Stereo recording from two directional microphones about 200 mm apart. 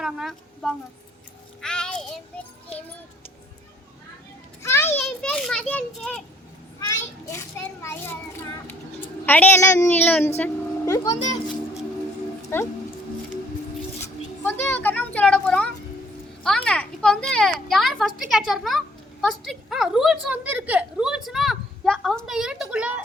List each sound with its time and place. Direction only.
0.0 s a woman's voice: centre (ahead or behind)
1.6 s child singing: 5° left (ahead or behind)
4.6 s a woman's voice: 15° left (ahead or behind)
7.3 s a woman's voice: 15° left (ahead or behind)
9.2 s a woman's voice: 10° left (ahead or behind)
11.2 s children playing: 35° left (ahead or behind)
12.5 s a woman's voice: 10° left (ahead or behind)
14.4 s a woman's voice: 10° left (ahead or behind); by 23.0 s 5° right (ahead or behind)